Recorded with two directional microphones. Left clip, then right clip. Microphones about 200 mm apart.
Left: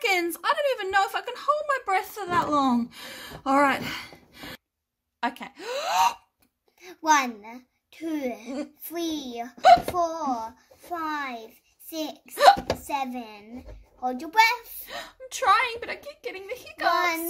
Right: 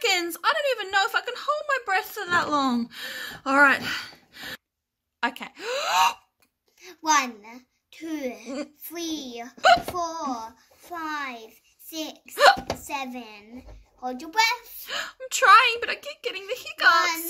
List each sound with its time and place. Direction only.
0.0 s a woman's voice: 5° right (ahead or behind)
6.8 s a child's voice: 45° left (ahead or behind)
14.9 s a woman's voice: 5° right (ahead or behind)